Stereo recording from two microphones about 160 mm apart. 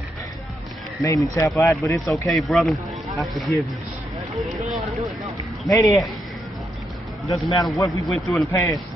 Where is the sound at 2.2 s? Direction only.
Centre (ahead or behind).